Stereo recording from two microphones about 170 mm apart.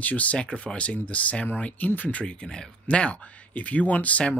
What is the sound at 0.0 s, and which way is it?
Speech, 10° left (ahead or behind).